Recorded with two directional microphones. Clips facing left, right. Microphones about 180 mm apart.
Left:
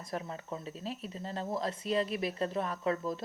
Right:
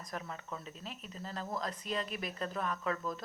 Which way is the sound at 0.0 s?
30° left (ahead or behind).